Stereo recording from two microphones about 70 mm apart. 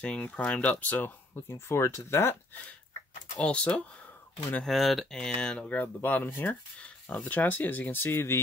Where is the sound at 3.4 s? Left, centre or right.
Centre.